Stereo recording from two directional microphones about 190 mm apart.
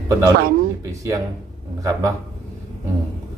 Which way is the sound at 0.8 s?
15° right (ahead or behind).